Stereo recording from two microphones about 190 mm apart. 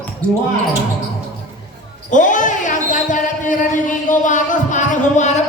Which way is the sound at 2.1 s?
40° left (ahead or behind).